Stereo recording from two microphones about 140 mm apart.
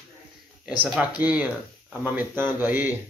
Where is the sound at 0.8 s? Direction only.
10° right (ahead or behind).